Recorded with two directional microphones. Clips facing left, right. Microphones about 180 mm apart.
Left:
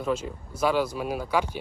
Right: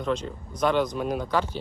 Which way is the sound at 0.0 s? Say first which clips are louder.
Even; 5° left (ahead or behind).